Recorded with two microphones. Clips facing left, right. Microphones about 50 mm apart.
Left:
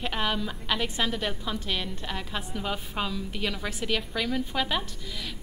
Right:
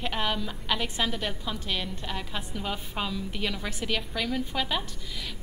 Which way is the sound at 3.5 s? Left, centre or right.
Centre.